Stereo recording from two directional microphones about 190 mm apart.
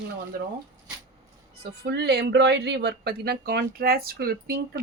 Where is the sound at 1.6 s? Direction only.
60° right (ahead or behind).